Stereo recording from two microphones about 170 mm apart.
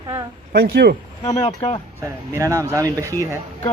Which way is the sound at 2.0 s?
15° right (ahead or behind).